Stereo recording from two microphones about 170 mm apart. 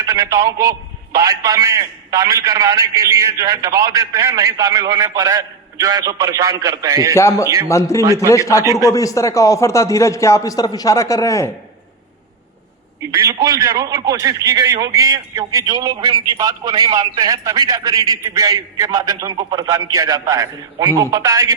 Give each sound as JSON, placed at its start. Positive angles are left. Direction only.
{"t": 0.0, "sound": "a man's voice", "side_deg": -20}
{"t": 7.2, "sound": "a man's voice", "side_deg": 15}
{"t": 8.0, "sound": "a man's voice", "side_deg": -20}
{"t": 8.3, "sound": "a man's voice", "side_deg": 20}
{"t": 13.1, "sound": "a man's voice", "side_deg": -20}